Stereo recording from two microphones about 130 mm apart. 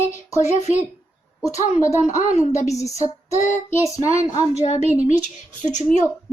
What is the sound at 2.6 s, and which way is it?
Speech, 25° left (ahead or behind).